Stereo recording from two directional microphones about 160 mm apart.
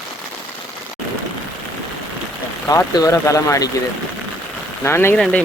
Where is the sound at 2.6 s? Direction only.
20° left (ahead or behind).